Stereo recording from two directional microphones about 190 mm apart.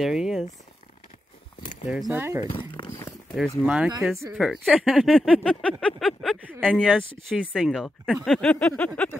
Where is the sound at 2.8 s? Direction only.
20° left (ahead or behind).